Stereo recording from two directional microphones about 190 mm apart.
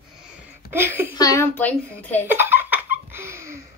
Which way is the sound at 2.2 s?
10° right (ahead or behind).